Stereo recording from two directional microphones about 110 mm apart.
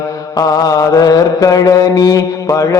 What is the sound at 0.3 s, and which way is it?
Mantra, 35° left (ahead or behind).